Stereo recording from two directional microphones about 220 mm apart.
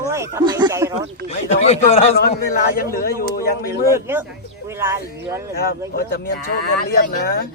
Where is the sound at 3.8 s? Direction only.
10° right (ahead or behind).